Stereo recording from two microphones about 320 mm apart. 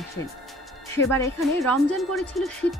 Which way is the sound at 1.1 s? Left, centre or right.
Centre.